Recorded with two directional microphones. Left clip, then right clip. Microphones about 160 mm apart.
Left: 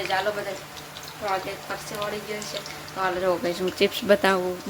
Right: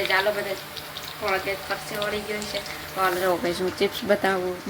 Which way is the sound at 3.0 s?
25° left (ahead or behind).